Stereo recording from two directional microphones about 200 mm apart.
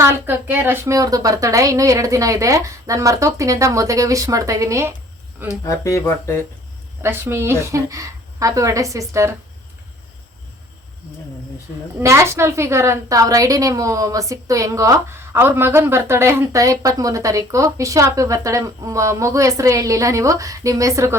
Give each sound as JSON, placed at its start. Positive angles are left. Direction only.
{"t": 0.0, "sound": "a woman's voice", "side_deg": -10}
{"t": 5.6, "sound": "speech", "side_deg": 15}
{"t": 7.0, "sound": "a woman's voice", "side_deg": -10}
{"t": 11.9, "sound": "a woman's voice", "side_deg": -15}